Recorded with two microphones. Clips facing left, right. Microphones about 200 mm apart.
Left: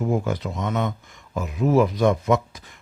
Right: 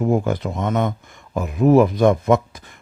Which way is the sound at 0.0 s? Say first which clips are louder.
Right 4 dB; 55° right (ahead or behind).